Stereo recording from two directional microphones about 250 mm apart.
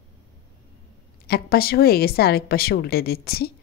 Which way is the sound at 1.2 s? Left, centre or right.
Left.